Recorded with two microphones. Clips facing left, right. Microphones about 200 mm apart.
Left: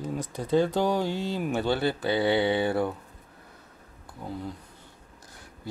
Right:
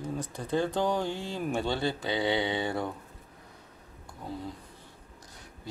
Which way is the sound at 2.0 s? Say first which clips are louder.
Left 6 dB; 20° right (ahead or behind).